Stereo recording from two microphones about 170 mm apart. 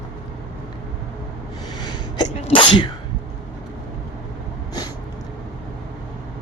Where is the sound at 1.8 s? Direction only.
25° left (ahead or behind).